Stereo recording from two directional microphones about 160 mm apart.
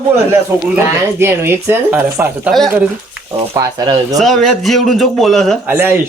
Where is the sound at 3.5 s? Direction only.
25° right (ahead or behind).